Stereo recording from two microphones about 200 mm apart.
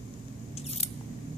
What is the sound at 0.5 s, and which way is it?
Scissors, 30° left (ahead or behind).